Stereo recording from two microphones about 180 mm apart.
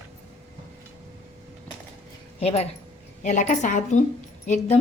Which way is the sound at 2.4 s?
35° left (ahead or behind).